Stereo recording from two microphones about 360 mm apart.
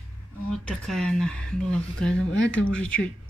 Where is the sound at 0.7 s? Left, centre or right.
Centre.